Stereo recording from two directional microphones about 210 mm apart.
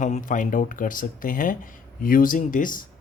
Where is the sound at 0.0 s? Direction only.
35° left (ahead or behind).